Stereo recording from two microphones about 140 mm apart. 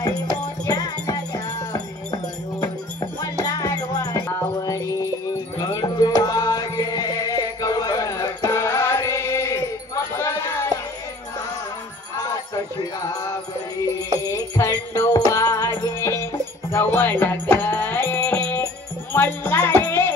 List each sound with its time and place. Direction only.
0.7 s music: 30° left (ahead or behind)
3.4 s music: 30° left (ahead or behind)
10.1 s a sound: 20° left (ahead or behind)
14.2 s music: 25° left (ahead or behind)